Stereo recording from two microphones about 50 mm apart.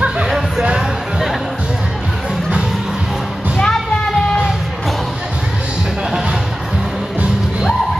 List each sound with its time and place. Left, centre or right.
3.5 s music: centre